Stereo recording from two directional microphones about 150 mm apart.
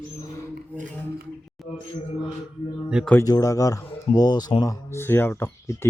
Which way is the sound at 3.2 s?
25° left (ahead or behind).